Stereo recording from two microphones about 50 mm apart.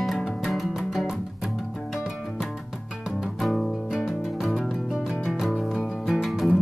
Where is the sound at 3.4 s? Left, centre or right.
Centre.